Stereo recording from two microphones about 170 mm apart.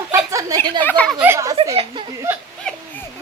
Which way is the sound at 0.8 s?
10° left (ahead or behind).